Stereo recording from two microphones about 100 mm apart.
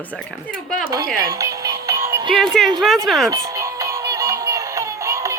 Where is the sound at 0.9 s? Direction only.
35° right (ahead or behind).